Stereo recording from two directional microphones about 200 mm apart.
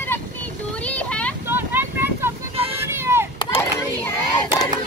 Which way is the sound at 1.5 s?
10° right (ahead or behind).